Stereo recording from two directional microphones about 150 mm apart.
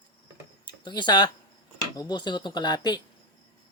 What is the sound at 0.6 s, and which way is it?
Speech, 30° left (ahead or behind).